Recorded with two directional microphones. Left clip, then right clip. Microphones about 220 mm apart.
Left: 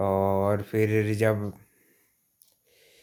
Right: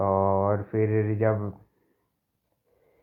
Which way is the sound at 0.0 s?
35° left (ahead or behind).